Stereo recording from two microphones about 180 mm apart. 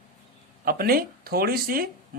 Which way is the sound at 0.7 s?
55° right (ahead or behind).